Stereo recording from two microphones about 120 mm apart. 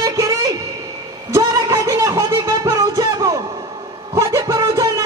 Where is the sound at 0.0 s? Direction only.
25° right (ahead or behind).